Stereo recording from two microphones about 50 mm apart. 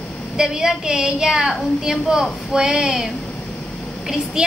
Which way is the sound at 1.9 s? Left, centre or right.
Centre.